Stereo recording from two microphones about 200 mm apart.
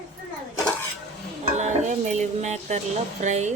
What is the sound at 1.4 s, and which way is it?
Stir, 35° right (ahead or behind).